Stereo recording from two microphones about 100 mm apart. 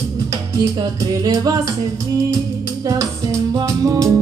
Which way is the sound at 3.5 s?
35° right (ahead or behind).